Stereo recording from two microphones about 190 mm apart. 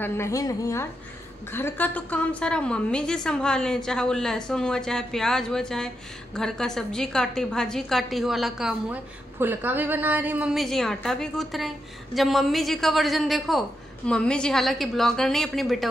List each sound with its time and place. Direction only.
0.0 s a woman's voice: 15° left (ahead or behind)